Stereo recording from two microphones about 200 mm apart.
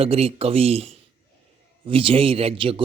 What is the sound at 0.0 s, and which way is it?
Speech, 30° right (ahead or behind).